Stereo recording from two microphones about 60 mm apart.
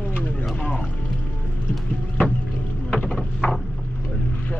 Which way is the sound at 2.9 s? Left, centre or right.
Centre.